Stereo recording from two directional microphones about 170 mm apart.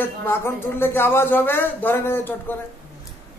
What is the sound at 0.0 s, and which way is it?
Speech, 15° left (ahead or behind).